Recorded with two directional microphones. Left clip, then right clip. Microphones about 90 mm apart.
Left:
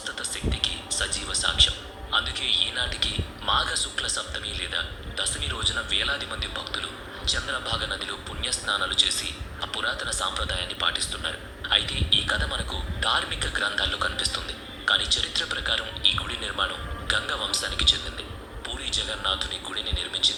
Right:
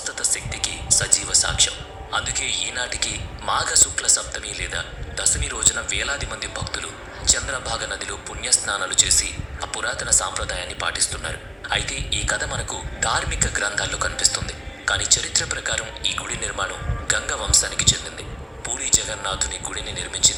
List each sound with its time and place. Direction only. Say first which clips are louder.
0.0 s speech: right 4 dB; 35° right (ahead or behind)